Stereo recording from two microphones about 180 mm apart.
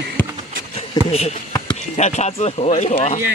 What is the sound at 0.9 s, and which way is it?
Basketball bounce, 20° left (ahead or behind).